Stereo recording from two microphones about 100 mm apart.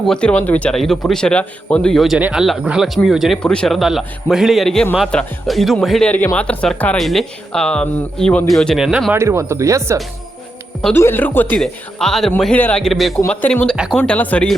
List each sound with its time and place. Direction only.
0.1 s a man's voice: 10° left (ahead or behind)
3.4 s speech: 10° left (ahead or behind)
3.8 s a man's voice: 5° right (ahead or behind)
6.3 s speech: 10° left (ahead or behind)
6.9 s a man's voice: centre (ahead or behind)
9.1 s speech: 30° right (ahead or behind)
10.9 s speech: 20° left (ahead or behind)
11.5 s a man's voice: 5° left (ahead or behind)
12.5 s speech: 20° left (ahead or behind)
12.8 s a man's voice: centre (ahead or behind)
13.2 s speech: 15° left (ahead or behind)